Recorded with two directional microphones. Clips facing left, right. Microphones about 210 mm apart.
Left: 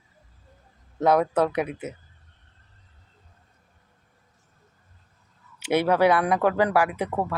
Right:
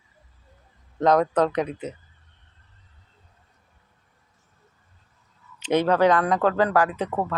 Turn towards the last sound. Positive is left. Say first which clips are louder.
# right 1 dB
turn(degrees=10)  # may be behind; listen again after turning